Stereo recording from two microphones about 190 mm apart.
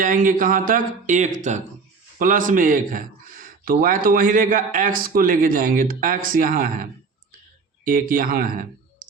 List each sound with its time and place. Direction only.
0.0 s speech: 45° right (ahead or behind)
7.9 s speech: 45° right (ahead or behind)